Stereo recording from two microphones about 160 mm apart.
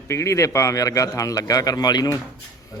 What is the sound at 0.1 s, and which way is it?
A man's voice, 20° left (ahead or behind).